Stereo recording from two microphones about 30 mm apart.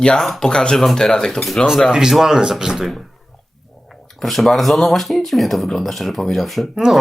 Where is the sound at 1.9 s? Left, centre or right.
Centre.